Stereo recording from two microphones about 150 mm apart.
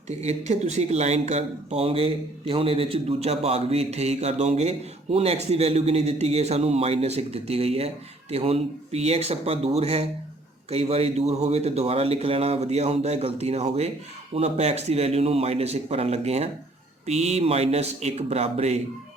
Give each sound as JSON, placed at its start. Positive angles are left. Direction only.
{"t": 0.1, "sound": "speech", "side_deg": -45}